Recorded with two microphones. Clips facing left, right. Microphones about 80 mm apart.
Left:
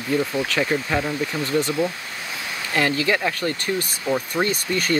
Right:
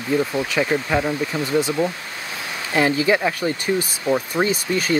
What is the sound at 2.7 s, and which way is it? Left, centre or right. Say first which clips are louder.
Speech: right 3 dB; centre.